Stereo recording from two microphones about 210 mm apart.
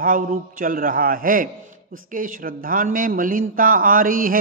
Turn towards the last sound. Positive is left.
turn(degrees=-40)  # may be behind; listen again after turning